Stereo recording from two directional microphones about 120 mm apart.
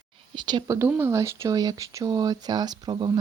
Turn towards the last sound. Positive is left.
turn(degrees=-40)  # may be behind; listen again after turning